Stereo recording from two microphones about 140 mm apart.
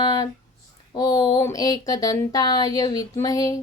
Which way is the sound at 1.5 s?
25° left (ahead or behind).